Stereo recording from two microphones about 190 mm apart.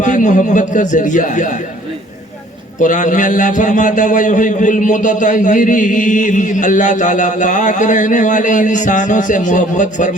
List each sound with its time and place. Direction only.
0.0 s a man's voice: 40° left (ahead or behind)
2.7 s a man's voice: 40° left (ahead or behind)